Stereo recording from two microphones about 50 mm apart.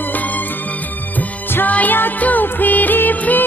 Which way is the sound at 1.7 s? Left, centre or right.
Left.